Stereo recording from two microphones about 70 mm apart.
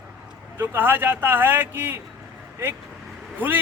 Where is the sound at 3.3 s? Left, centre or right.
Right.